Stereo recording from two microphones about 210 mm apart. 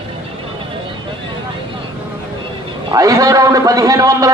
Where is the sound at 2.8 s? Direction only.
15° right (ahead or behind).